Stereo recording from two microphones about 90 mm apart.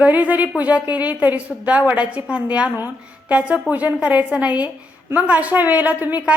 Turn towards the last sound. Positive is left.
turn(degrees=-20)  # may be behind; listen again after turning